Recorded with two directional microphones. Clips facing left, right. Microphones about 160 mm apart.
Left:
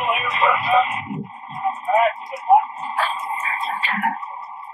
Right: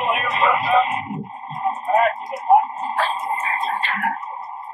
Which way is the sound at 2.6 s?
40° right (ahead or behind).